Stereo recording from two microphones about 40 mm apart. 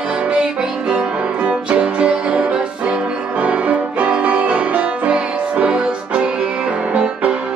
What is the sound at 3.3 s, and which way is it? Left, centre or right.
Music, right.